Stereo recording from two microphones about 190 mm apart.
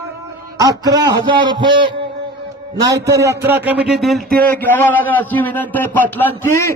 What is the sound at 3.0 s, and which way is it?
A man's voice, 15° right (ahead or behind).